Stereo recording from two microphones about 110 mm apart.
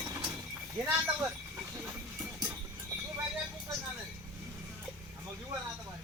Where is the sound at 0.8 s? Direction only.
20° right (ahead or behind).